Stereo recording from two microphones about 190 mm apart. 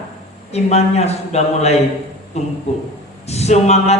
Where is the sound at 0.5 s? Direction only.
35° left (ahead or behind).